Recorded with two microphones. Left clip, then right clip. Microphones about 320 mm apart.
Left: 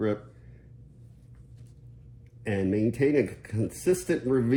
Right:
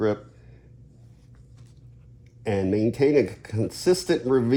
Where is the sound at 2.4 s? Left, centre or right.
Right.